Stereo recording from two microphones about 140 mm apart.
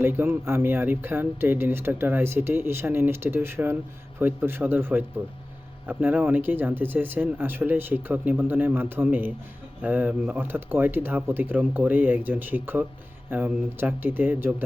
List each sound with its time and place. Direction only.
0.0 s speech: 15° right (ahead or behind)